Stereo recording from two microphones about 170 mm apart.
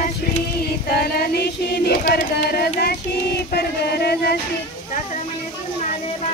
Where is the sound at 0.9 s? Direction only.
60° left (ahead or behind).